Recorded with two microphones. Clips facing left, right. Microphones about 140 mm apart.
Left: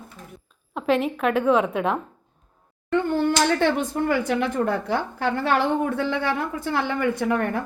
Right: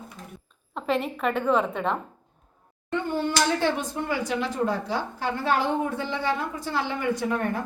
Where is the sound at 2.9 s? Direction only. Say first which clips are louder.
Left 5 dB; 55° left (ahead or behind).